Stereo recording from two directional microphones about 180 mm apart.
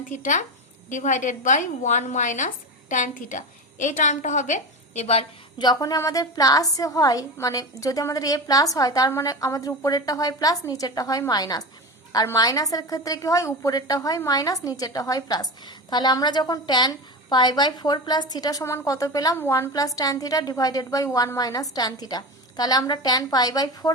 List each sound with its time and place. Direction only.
0.0 s a woman's voice: 45° left (ahead or behind)
5.6 s a woman's voice: 20° left (ahead or behind)